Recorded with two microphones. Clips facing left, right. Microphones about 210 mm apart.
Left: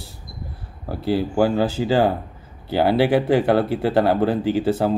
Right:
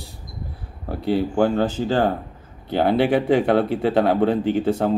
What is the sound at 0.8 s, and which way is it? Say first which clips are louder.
Speech: even; centre (ahead or behind).